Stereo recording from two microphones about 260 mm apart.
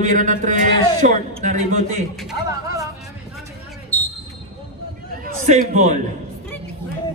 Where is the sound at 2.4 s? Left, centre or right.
Centre.